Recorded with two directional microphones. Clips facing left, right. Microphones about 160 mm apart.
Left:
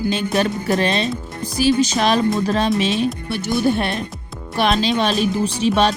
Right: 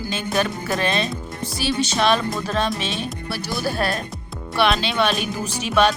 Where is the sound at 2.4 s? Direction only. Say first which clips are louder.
Left 4 dB; 35° left (ahead or behind).